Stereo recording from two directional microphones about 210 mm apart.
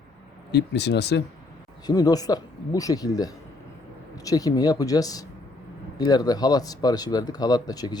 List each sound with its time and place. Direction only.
0.5 s speech: 55° left (ahead or behind)
1.9 s speech: 15° left (ahead or behind)